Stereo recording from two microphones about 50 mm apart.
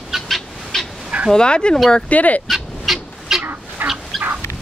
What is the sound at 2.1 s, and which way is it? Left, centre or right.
Speech, left.